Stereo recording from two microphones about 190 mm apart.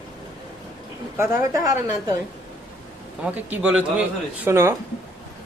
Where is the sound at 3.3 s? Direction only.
5° right (ahead or behind).